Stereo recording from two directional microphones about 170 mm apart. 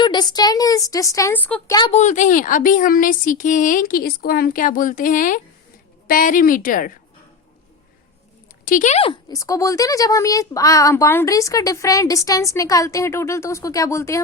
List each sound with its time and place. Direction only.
0.0 s speech: 25° left (ahead or behind); by 1.7 s 10° left (ahead or behind)
1.9 s a woman's voice: 45° left (ahead or behind)
8.6 s a woman's voice: 50° left (ahead or behind)
9.3 s speech: 20° left (ahead or behind)